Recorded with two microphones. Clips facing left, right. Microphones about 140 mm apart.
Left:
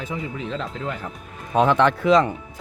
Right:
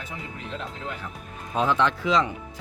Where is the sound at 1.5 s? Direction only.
60° left (ahead or behind).